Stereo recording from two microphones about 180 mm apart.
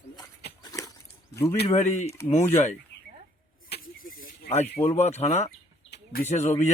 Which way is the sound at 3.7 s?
50° left (ahead or behind).